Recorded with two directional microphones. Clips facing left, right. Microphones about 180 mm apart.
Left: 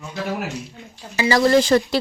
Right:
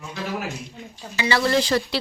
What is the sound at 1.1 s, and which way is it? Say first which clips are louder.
Speech: left 5 dB; 35° left (ahead or behind).